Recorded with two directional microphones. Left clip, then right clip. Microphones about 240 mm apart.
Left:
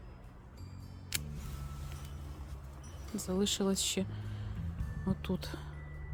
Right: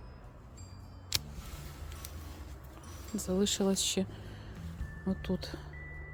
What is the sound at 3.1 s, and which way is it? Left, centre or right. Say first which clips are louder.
Speech: right 2 dB; centre.